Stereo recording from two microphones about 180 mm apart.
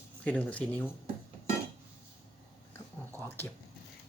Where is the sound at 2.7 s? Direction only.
15° left (ahead or behind).